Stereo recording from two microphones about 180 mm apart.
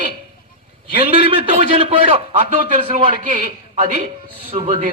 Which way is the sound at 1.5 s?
30° right (ahead or behind).